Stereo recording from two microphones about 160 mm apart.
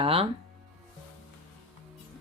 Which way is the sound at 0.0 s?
35° right (ahead or behind).